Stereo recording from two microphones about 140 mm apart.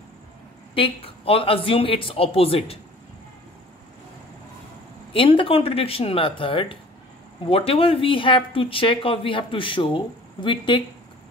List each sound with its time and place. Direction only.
0.7 s speech: 40° left (ahead or behind)
5.1 s speech: 40° left (ahead or behind)